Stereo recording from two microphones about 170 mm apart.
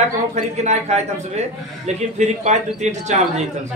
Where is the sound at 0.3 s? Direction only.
40° right (ahead or behind).